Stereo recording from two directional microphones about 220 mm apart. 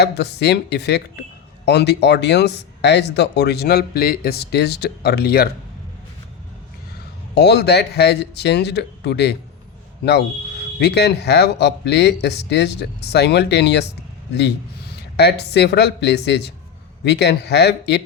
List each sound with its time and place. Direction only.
0.0 s speech: 50° left (ahead or behind)
7.3 s speech: 50° left (ahead or behind)
15.1 s speech: 50° left (ahead or behind)